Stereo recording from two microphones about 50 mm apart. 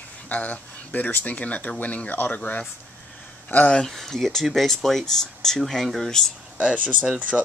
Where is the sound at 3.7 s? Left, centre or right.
Centre.